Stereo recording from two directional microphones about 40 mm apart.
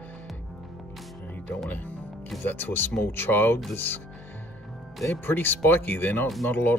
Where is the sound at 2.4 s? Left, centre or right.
Left.